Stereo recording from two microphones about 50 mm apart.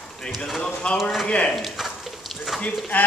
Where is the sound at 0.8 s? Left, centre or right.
Left.